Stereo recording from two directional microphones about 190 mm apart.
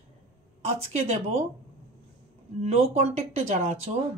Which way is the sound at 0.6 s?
35° right (ahead or behind).